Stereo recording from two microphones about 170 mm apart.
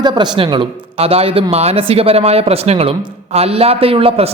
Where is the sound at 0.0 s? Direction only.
25° right (ahead or behind).